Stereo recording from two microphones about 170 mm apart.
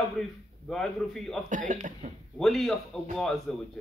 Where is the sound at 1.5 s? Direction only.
50° right (ahead or behind).